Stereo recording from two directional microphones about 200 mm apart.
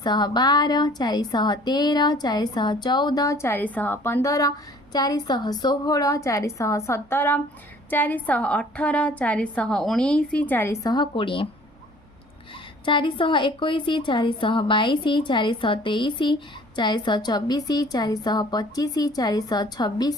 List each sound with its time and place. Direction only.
0.0 s a woman's voice: 20° left (ahead or behind)
12.8 s a woman's voice: 25° left (ahead or behind)